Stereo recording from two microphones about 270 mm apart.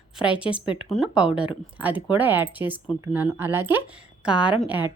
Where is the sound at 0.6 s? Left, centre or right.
Centre.